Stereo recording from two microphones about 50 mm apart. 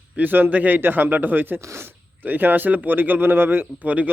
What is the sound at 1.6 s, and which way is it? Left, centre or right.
Speech, right.